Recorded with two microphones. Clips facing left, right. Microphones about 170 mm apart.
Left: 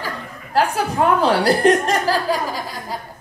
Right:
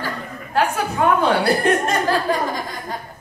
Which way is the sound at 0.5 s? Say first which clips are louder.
Left 1 dB; 35° left (ahead or behind).